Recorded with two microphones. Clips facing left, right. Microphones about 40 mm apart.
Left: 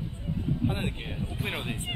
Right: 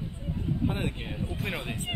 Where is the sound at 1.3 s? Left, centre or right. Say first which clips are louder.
Left 2 dB; left.